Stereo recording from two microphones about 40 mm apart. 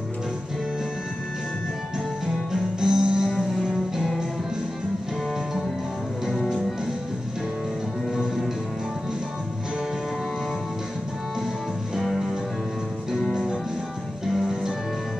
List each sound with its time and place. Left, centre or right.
2.5 s music: centre
6.3 s music: centre
11.9 s music: centre
14.4 s music: centre